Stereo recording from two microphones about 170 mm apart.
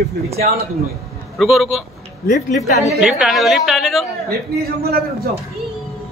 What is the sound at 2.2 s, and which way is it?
Speech, 55° left (ahead or behind).